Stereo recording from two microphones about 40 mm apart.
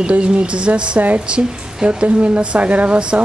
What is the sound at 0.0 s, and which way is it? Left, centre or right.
Speech, right.